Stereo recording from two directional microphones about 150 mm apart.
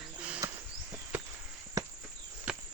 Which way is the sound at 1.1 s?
10° right (ahead or behind).